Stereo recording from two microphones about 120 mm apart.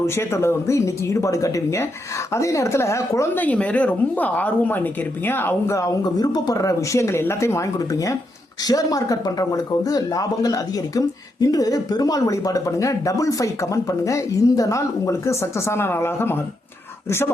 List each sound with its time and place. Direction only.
0.0 s speech: 20° left (ahead or behind)
3.4 s speech: 10° left (ahead or behind)